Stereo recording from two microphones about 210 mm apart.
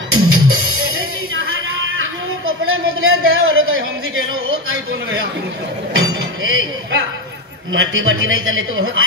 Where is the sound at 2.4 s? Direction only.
75° right (ahead or behind).